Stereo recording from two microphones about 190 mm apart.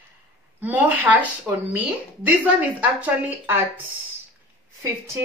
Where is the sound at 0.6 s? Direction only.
10° right (ahead or behind).